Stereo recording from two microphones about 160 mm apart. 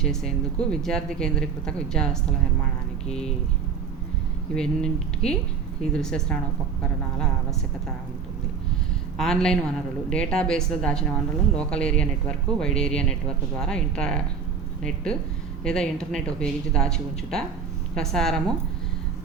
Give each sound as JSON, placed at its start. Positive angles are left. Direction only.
{"t": 0.0, "sound": "speech", "side_deg": 5}
{"t": 3.1, "sound": "speech", "side_deg": 40}
{"t": 4.5, "sound": "speech", "side_deg": 5}
{"t": 9.1, "sound": "speech", "side_deg": 5}
{"t": 17.9, "sound": "speech", "side_deg": 5}